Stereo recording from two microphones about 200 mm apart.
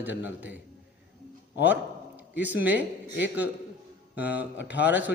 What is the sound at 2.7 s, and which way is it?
Speech, 60° left (ahead or behind).